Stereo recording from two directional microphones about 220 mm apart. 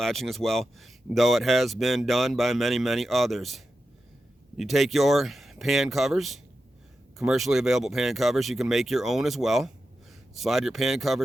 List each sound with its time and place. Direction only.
0.0 s speech: centre (ahead or behind)